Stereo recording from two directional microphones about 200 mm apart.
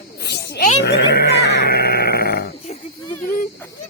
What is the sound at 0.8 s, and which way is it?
Goat, 55° left (ahead or behind).